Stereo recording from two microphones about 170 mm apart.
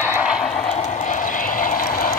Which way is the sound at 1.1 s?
55° left (ahead or behind).